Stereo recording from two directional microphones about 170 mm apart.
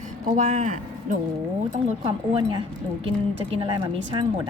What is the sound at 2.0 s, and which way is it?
A woman's voice, 30° right (ahead or behind).